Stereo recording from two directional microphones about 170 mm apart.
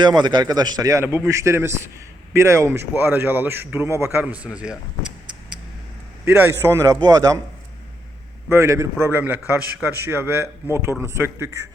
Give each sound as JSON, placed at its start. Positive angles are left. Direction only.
{"t": 0.0, "sound": "a man's voice", "side_deg": -25}
{"t": 6.2, "sound": "speech", "side_deg": -10}
{"t": 8.4, "sound": "speech", "side_deg": -15}